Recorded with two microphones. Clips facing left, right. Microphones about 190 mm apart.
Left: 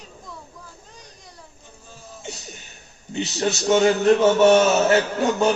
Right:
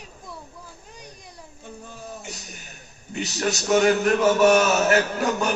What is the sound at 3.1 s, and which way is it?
A man's voice, 25° left (ahead or behind).